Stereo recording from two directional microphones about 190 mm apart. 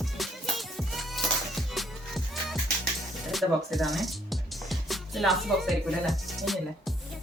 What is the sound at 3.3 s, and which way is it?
Speech, centre (ahead or behind).